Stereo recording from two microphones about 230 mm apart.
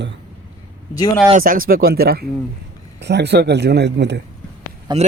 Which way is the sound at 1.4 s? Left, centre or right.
Right.